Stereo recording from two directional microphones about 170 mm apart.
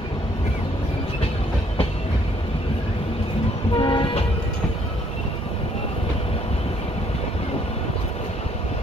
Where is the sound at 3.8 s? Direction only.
30° left (ahead or behind).